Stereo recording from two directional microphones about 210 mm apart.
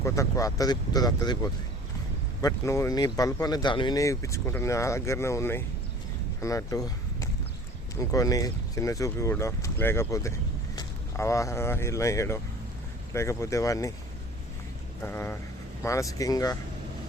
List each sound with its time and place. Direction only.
0.0 s speech: 15° left (ahead or behind)
2.4 s speech: 15° left (ahead or behind)
15.0 s speech: 10° left (ahead or behind)